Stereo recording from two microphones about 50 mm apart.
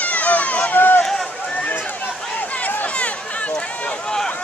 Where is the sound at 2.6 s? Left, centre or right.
Left.